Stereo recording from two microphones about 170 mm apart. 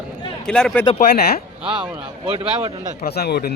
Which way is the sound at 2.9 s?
65° left (ahead or behind).